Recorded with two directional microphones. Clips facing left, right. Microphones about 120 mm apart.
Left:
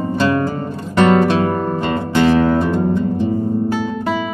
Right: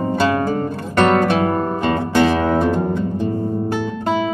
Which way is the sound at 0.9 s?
15° left (ahead or behind).